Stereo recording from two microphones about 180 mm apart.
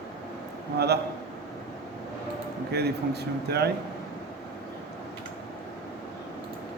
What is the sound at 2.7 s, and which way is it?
A man's voice, 65° right (ahead or behind).